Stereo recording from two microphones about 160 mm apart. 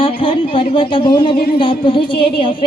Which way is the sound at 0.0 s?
35° left (ahead or behind).